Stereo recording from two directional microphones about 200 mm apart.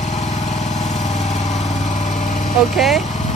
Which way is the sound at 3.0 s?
40° left (ahead or behind).